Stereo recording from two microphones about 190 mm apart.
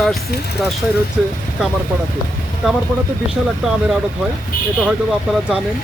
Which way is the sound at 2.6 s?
5° right (ahead or behind).